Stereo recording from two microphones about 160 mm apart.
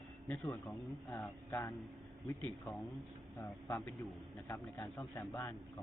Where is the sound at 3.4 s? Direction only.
15° left (ahead or behind).